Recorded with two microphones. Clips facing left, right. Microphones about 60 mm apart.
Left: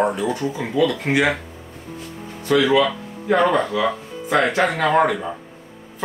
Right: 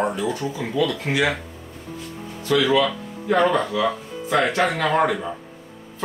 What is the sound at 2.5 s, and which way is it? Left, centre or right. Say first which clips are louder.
Speech: left 2 dB; centre.